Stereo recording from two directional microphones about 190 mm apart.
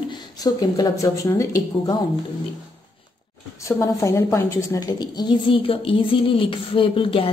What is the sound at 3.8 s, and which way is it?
Speech, 15° left (ahead or behind).